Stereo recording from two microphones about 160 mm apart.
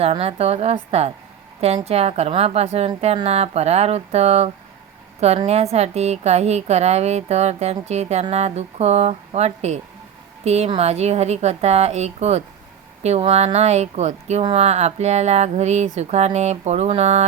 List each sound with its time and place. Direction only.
0.0 s a woman's voice: 40° right (ahead or behind)